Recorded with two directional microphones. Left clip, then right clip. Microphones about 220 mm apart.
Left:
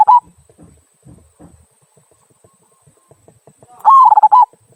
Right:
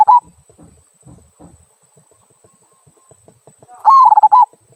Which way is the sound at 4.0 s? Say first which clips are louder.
Even; 15° left (ahead or behind).